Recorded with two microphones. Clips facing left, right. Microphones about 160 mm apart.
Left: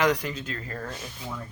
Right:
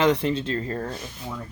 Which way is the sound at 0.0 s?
25° right (ahead or behind).